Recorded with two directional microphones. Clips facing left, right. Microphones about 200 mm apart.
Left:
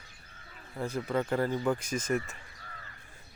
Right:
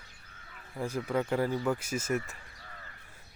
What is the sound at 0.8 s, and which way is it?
Speech, 10° right (ahead or behind).